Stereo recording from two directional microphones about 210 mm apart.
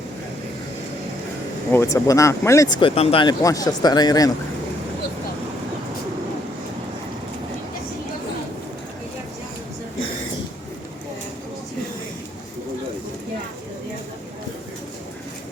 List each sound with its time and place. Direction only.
1.7 s speech: 15° left (ahead or behind)